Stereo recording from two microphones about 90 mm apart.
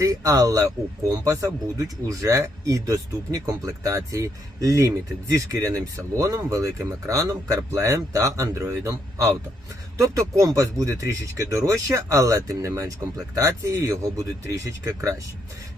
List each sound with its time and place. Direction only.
0.0 s speech: 40° right (ahead or behind)